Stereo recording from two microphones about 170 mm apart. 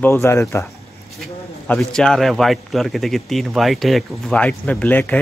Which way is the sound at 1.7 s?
5° left (ahead or behind).